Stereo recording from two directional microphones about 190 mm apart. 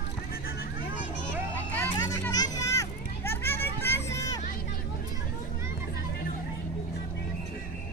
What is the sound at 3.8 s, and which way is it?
Vehicle, 15° left (ahead or behind).